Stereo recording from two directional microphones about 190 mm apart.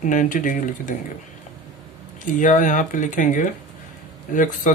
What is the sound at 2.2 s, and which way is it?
Speech, 40° left (ahead or behind).